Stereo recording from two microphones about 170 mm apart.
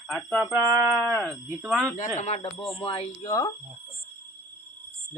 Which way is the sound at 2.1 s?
40° left (ahead or behind).